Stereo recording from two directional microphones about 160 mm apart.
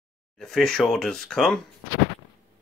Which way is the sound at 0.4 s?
5° left (ahead or behind).